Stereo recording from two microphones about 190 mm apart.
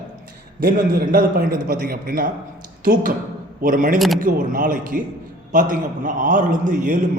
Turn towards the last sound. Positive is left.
turn(degrees=-40)  # may be behind; listen again after turning